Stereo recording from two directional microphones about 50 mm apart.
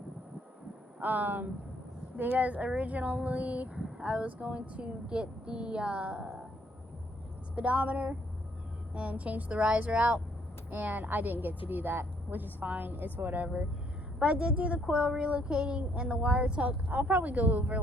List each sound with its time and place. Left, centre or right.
0.9 s a woman's voice: right
7.5 s a woman's voice: right